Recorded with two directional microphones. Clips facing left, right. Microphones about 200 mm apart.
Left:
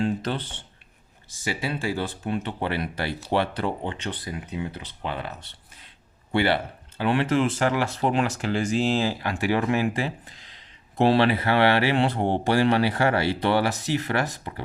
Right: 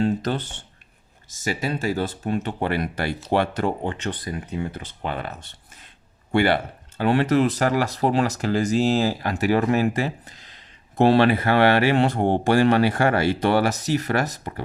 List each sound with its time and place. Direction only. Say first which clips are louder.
0.0 s speech: right 3 dB; 40° right (ahead or behind)